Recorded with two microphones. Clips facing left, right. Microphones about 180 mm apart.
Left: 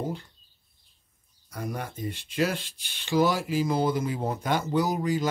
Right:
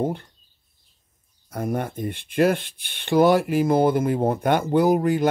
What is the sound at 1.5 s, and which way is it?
Speech, 50° right (ahead or behind).